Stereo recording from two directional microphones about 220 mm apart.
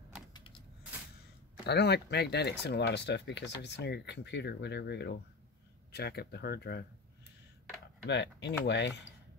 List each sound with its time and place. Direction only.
1.7 s speech: 50° left (ahead or behind)
8.1 s speech: 50° left (ahead or behind)